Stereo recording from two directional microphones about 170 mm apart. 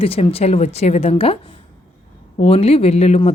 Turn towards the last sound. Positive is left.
turn(degrees=40)  # may be behind; listen again after turning